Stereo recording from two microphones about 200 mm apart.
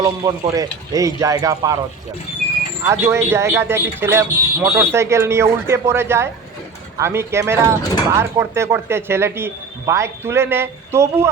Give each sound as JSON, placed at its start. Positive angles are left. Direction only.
{"t": 0.0, "sound": "speech", "side_deg": -20}
{"t": 2.9, "sound": "speech", "side_deg": -15}